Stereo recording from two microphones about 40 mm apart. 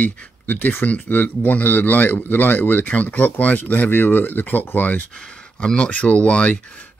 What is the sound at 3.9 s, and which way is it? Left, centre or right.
Speech, left.